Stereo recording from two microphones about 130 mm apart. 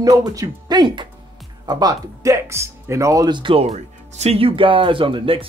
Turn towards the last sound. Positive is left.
turn(degrees=-45)  # may be behind; listen again after turning